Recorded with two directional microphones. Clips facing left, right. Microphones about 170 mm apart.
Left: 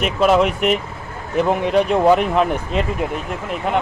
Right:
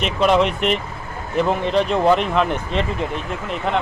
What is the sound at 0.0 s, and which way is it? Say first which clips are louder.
Speech: left 2 dB; 5° left (ahead or behind).